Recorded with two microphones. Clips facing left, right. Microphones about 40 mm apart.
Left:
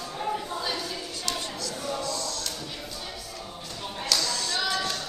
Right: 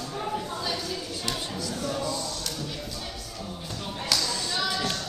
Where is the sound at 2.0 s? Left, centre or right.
Centre.